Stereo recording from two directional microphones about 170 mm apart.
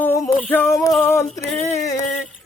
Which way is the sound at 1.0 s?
15° left (ahead or behind).